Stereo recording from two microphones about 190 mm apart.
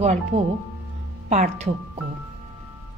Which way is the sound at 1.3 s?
40° right (ahead or behind).